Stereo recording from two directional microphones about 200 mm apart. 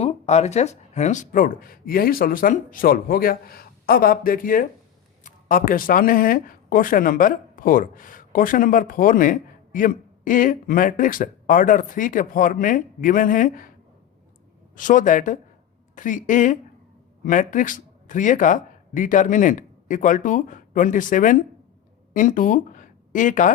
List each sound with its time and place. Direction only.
0.0 s speech: 30° left (ahead or behind)
14.8 s speech: 40° left (ahead or behind)